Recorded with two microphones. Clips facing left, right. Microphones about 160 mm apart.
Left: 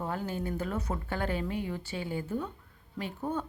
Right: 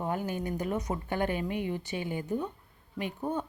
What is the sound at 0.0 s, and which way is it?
A woman's voice, 15° right (ahead or behind).